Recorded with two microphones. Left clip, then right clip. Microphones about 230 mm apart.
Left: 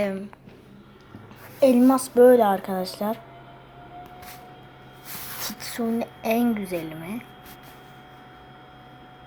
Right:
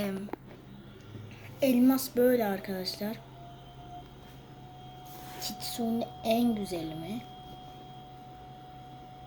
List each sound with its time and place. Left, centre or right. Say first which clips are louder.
1.5 s a woman's voice: left 8 dB; centre
2.1 s a woman's voice: left 14 dB; left
5.5 s speech: left 5 dB; centre
6.4 s a woman's voice: left 5 dB; left